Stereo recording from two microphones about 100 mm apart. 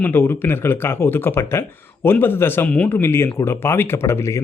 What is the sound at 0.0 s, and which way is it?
Speech, 20° left (ahead or behind).